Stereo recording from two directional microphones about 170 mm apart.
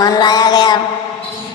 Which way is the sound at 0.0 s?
25° left (ahead or behind).